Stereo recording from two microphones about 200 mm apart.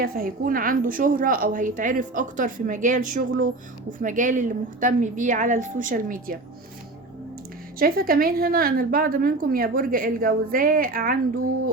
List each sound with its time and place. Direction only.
0.0 s a woman's voice: 50° right (ahead or behind)
7.8 s a woman's voice: 50° right (ahead or behind)